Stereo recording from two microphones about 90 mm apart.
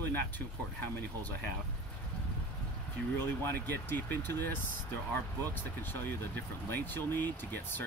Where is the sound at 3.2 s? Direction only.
20° left (ahead or behind).